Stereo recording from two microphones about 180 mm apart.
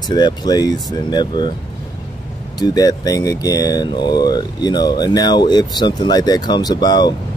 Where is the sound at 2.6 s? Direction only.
20° left (ahead or behind).